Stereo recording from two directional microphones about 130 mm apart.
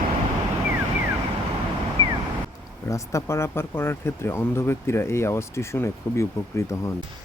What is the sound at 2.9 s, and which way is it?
Speech, 25° left (ahead or behind).